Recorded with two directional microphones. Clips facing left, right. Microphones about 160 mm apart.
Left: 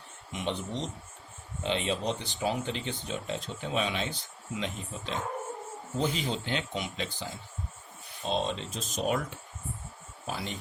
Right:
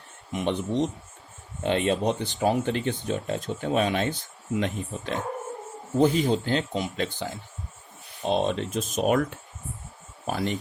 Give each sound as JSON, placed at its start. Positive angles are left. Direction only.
{"t": 0.3, "sound": "speech", "side_deg": -55}
{"t": 6.0, "sound": "speech", "side_deg": -45}
{"t": 6.9, "sound": "speech", "side_deg": -55}
{"t": 10.2, "sound": "speech", "side_deg": -55}